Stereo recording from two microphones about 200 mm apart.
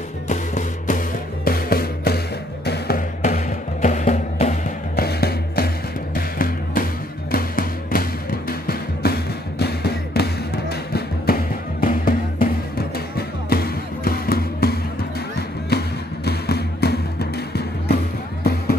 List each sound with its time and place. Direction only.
0.3 s music: 40° left (ahead or behind)
3.2 s music: 40° left (ahead or behind)
5.0 s music: 50° left (ahead or behind)